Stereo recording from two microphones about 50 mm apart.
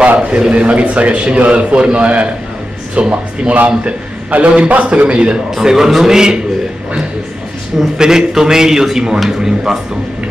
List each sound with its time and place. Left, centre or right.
0.0 s a sound: right
0.4 s a man's voice: centre
5.5 s a man's voice: centre
8.0 s a man's voice: centre